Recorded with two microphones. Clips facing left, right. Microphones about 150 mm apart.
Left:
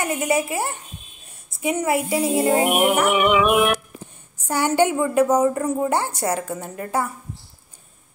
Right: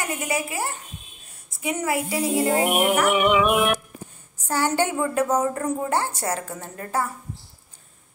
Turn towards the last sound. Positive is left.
turn(degrees=15)  # may be behind; listen again after turning